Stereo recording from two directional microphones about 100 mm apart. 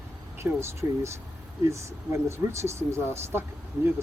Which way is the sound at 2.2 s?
25° right (ahead or behind).